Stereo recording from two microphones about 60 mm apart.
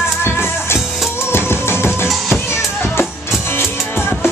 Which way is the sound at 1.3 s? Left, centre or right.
Left.